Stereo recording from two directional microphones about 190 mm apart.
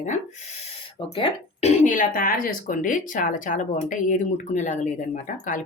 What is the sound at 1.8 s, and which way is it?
Speech, 45° left (ahead or behind).